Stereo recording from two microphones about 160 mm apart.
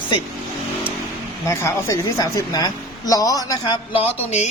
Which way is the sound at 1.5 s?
15° left (ahead or behind).